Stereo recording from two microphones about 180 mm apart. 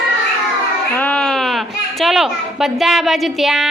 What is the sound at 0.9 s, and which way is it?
A child's voice, 5° left (ahead or behind).